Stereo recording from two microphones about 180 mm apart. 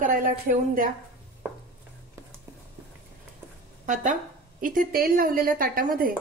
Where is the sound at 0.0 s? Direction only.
50° right (ahead or behind).